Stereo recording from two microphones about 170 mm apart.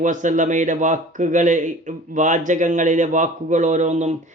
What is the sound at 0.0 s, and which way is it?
Speech, 45° right (ahead or behind).